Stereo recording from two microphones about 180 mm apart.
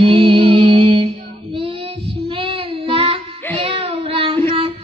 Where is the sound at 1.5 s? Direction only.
30° right (ahead or behind).